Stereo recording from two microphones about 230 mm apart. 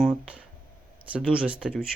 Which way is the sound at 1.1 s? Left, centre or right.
Centre.